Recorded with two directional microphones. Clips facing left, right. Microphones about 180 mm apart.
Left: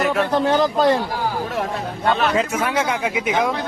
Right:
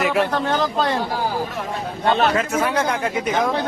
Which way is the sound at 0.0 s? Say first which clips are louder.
Even; 5° right (ahead or behind).